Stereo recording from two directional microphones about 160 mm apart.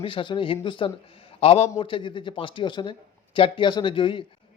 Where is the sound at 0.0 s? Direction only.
30° left (ahead or behind).